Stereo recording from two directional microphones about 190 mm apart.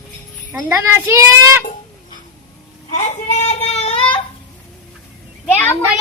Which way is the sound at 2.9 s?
40° left (ahead or behind).